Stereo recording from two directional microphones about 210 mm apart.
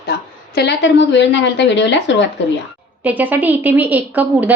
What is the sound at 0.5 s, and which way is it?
A woman's voice, 55° left (ahead or behind).